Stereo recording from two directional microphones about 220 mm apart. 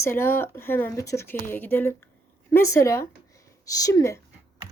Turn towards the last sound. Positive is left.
turn(degrees=15)  # may be behind; listen again after turning